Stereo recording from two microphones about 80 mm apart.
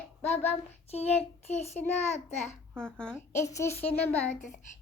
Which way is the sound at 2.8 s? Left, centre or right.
Centre.